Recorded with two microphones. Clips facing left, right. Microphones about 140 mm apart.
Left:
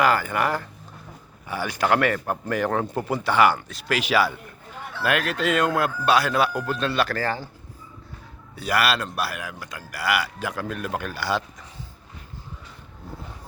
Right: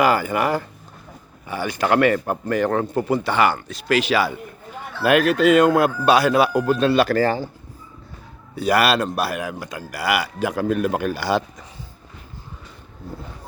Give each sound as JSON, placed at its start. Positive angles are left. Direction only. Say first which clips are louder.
{"t": 0.0, "sound": "speech", "louder": "right 3 dB", "side_deg": -5}
{"t": 1.5, "sound": "speech", "louder": "right 2 dB", "side_deg": 5}
{"t": 5.0, "sound": "speech", "louder": "right 8 dB", "side_deg": -10}
{"t": 8.5, "sound": "speech", "louder": "right 5 dB", "side_deg": -20}